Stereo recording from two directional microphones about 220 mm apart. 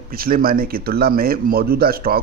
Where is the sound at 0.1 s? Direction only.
40° right (ahead or behind).